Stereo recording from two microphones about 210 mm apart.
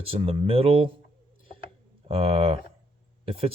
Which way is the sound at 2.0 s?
30° right (ahead or behind).